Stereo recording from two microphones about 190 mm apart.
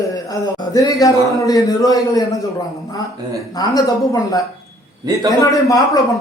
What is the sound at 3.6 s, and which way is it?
A man's voice, 20° left (ahead or behind).